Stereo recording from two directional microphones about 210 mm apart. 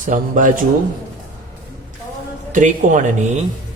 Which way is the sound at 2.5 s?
35° right (ahead or behind).